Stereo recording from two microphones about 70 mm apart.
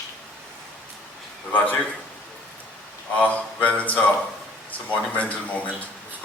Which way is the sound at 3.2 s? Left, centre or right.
Centre.